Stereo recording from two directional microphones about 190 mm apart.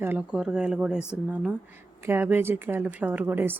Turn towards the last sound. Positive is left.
turn(degrees=-10)  # may be behind; listen again after turning